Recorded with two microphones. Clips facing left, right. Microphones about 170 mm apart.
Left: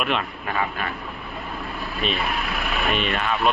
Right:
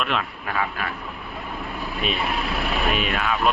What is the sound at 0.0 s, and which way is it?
Speech, centre (ahead or behind).